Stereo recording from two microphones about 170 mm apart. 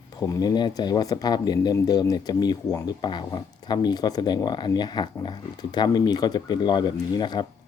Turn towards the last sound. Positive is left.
turn(degrees=25)  # may be behind; listen again after turning